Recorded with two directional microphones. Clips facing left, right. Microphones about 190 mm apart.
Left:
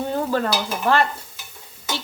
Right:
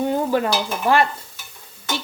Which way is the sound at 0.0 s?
15° right (ahead or behind).